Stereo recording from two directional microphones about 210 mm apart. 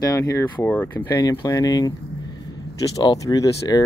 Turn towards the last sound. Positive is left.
turn(degrees=15)  # may be behind; listen again after turning